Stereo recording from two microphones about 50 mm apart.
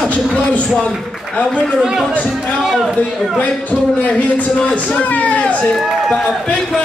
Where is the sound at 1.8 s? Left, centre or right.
Centre.